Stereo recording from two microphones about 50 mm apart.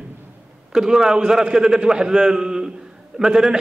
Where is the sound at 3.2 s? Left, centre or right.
Centre.